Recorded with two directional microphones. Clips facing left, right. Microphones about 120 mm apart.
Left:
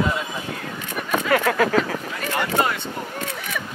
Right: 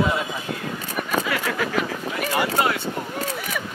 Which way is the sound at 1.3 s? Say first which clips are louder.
Left 7 dB; 45° left (ahead or behind).